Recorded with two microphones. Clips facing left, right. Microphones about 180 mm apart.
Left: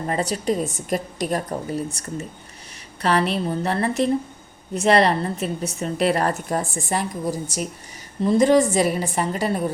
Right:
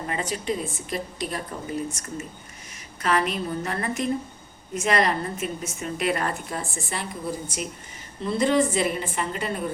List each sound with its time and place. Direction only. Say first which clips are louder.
0.1 s a woman's voice: left 6 dB; 40° left (ahead or behind)
3.0 s a woman's voice: left 4 dB; 35° left (ahead or behind)